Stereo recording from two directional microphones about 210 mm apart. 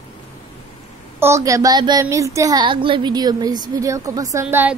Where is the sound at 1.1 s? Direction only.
10° right (ahead or behind).